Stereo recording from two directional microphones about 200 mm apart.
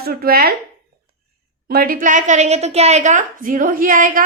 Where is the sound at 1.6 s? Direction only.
45° right (ahead or behind).